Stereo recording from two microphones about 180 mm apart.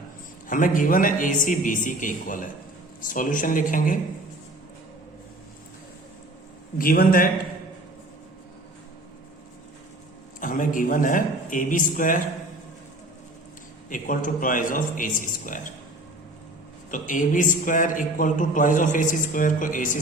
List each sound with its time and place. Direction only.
0.4 s a man's voice: 50° left (ahead or behind)
6.7 s a man's voice: 55° left (ahead or behind)
10.4 s a man's voice: 50° left (ahead or behind)
13.9 s a man's voice: 45° left (ahead or behind)
16.9 s a man's voice: 45° left (ahead or behind)